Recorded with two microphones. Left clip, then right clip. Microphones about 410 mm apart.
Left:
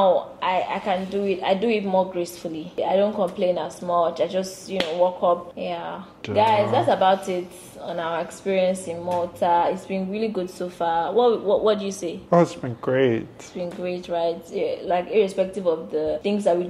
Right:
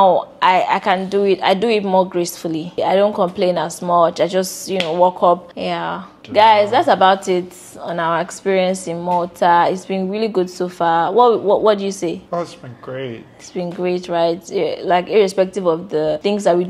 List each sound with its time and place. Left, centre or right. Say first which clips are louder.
0.0 s a woman's voice: right 7 dB; right
12.3 s speech: left 5 dB; left
13.6 s a woman's voice: right 8 dB; right